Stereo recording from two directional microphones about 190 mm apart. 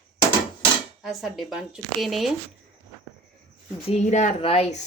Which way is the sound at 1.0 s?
Centre (ahead or behind).